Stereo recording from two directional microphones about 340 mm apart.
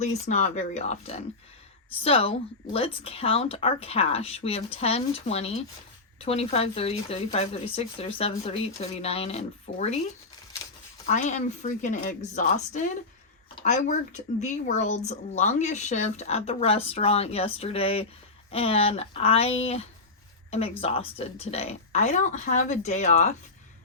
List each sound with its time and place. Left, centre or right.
0.0 s speech: left
11.0 s speech: left